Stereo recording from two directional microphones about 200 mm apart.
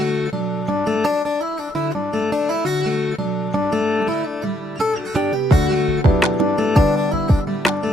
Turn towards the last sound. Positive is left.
turn(degrees=0)  # may be behind; listen again after turning